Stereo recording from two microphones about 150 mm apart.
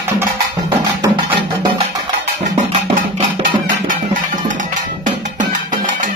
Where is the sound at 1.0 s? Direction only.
30° right (ahead or behind).